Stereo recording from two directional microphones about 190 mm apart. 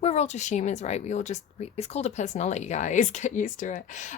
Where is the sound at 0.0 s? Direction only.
35° left (ahead or behind).